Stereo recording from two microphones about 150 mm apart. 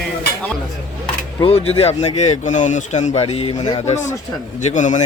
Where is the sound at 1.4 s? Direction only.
45° left (ahead or behind).